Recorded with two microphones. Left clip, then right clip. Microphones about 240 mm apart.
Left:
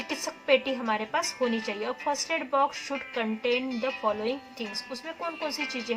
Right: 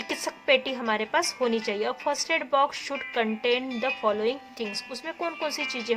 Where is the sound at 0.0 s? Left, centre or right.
Right.